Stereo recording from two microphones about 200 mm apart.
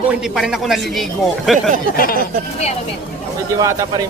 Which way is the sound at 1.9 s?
45° left (ahead or behind).